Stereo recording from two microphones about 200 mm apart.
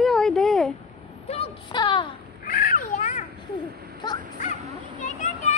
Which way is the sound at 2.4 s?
45° left (ahead or behind).